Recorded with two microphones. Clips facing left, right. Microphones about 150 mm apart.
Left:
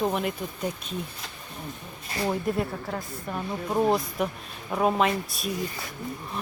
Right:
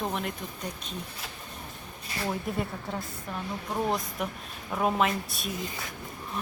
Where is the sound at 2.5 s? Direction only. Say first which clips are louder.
Left 4 dB; centre (ahead or behind).